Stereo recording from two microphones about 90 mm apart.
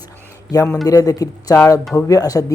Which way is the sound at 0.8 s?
45° left (ahead or behind).